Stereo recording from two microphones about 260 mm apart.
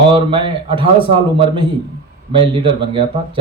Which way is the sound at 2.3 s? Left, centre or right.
Centre.